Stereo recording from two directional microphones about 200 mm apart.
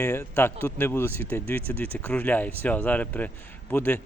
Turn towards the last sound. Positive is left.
turn(degrees=10)  # may be behind; listen again after turning